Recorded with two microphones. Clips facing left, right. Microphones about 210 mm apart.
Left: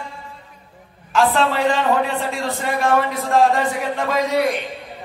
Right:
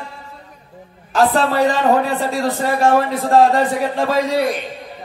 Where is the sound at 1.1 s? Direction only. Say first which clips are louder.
Right 2 dB; 40° right (ahead or behind).